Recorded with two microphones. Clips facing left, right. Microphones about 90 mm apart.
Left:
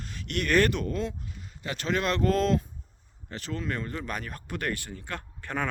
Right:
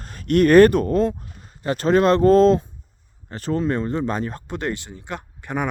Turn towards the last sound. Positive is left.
turn(degrees=-15)  # may be behind; listen again after turning